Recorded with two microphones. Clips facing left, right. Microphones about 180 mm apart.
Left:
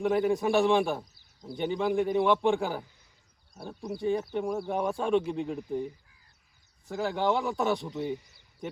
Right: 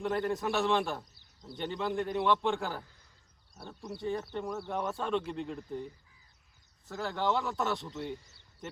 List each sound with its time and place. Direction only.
0.0 s a man's voice: 10° left (ahead or behind)
6.8 s a man's voice: 15° left (ahead or behind)